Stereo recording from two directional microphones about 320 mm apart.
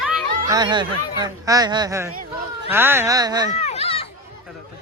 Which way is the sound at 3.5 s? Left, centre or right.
Centre.